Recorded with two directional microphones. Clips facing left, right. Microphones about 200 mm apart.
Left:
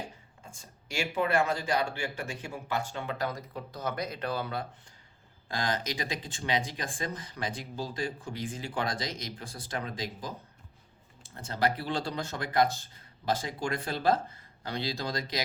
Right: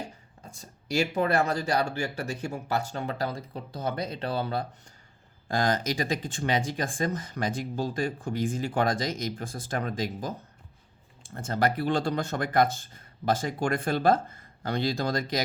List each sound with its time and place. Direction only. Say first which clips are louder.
0.4 s speech: right 8 dB; 40° right (ahead or behind)
5.5 s speech: right 6 dB; 45° right (ahead or behind)